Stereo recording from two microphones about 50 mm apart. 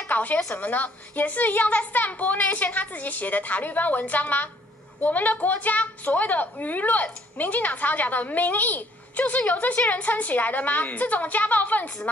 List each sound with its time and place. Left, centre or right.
0.1 s a woman's voice: left